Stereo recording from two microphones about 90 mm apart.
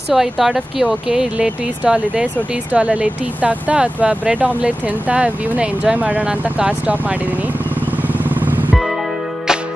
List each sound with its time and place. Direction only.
0.1 s speech: 5° right (ahead or behind)
8.1 s vehicle: 20° right (ahead or behind)